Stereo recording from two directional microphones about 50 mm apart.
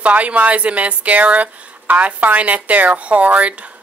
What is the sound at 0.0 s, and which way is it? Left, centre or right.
A woman's voice, right.